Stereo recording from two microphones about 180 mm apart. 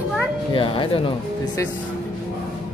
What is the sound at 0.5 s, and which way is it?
Speech, 30° left (ahead or behind).